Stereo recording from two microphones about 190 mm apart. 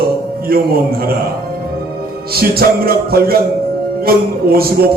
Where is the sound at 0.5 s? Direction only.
55° right (ahead or behind).